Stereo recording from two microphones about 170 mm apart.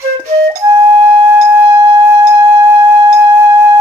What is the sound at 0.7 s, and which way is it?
Music, 15° right (ahead or behind).